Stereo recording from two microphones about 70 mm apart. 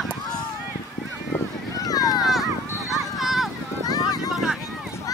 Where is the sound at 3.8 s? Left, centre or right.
Left.